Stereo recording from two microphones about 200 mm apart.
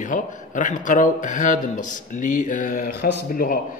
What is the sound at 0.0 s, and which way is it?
A man's voice, 40° left (ahead or behind).